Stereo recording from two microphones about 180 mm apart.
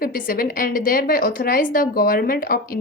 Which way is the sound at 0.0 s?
55° left (ahead or behind).